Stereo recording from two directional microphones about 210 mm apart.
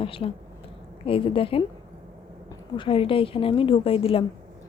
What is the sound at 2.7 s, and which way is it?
Speech, 25° left (ahead or behind).